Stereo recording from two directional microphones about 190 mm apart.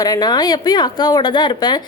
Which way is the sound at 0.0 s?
20° left (ahead or behind).